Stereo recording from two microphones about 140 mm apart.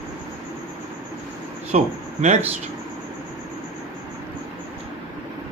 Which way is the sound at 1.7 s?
55° right (ahead or behind).